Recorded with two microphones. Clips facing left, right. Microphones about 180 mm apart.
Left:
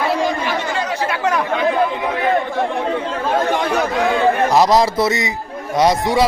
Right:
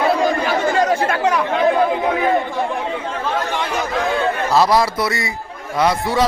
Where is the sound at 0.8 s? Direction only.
50° right (ahead or behind).